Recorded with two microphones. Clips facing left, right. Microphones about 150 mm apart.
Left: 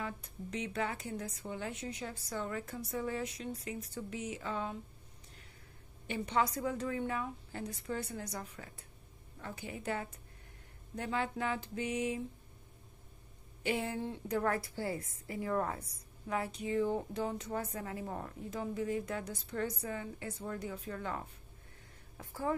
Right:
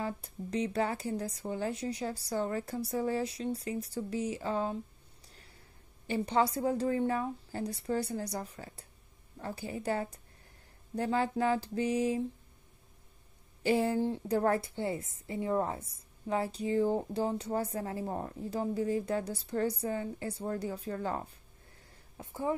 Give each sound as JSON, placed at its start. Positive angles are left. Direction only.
{"t": 0.0, "sound": "a woman's voice", "side_deg": -35}
{"t": 6.0, "sound": "a woman's voice", "side_deg": -35}
{"t": 13.6, "sound": "a woman's voice", "side_deg": -35}
{"t": 22.1, "sound": "speech", "side_deg": -20}